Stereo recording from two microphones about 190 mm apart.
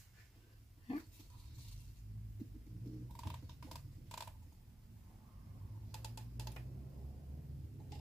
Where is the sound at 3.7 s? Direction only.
Centre (ahead or behind).